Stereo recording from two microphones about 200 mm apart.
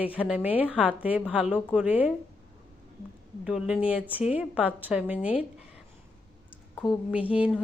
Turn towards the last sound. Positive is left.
turn(degrees=-5)  # may be behind; listen again after turning